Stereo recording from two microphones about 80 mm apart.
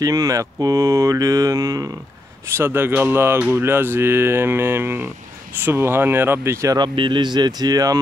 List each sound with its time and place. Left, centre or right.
0.0 s speech: right
2.4 s speech: right
6.7 s speech: right